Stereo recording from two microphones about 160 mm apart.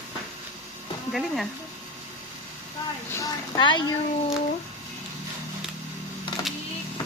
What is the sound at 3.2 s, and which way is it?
Speech, 25° left (ahead or behind).